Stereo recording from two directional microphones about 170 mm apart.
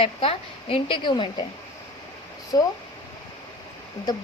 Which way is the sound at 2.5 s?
20° left (ahead or behind).